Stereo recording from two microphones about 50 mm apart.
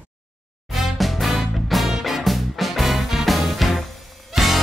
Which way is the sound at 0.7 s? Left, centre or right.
Centre.